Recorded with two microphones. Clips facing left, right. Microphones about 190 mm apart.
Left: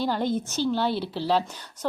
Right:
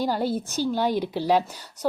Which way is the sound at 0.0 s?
10° right (ahead or behind).